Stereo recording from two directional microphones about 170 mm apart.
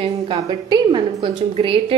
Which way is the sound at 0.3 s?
25° right (ahead or behind).